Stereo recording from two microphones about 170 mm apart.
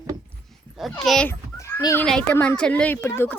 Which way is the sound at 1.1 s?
5° left (ahead or behind).